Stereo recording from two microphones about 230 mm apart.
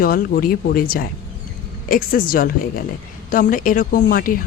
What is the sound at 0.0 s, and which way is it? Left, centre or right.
Speech, left.